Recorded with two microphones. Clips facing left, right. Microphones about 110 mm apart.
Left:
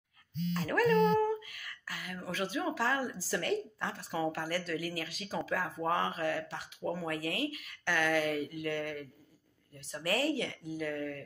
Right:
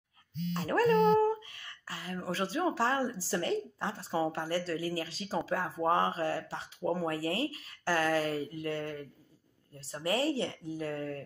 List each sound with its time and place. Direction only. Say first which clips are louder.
0.5 s speech: right 2 dB; 30° right (ahead or behind)